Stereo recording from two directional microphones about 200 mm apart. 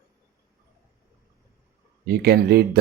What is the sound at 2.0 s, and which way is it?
Speech, 50° right (ahead or behind).